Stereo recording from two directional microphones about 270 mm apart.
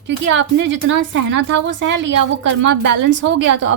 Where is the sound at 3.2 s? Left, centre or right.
Right.